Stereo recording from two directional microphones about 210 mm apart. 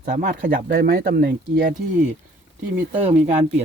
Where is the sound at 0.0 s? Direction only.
40° right (ahead or behind).